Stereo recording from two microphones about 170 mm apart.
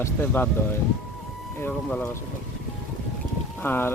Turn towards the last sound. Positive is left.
turn(degrees=10)  # may be behind; listen again after turning